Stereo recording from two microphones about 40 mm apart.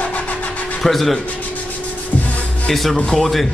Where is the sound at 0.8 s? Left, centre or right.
Centre.